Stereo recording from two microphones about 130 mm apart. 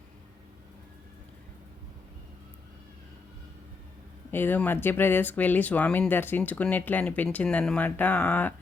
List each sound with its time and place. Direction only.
4.3 s speech: 15° left (ahead or behind)